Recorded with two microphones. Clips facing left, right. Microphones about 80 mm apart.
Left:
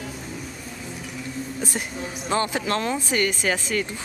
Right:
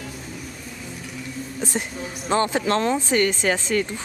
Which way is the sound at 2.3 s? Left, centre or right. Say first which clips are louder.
Right 3 dB; right.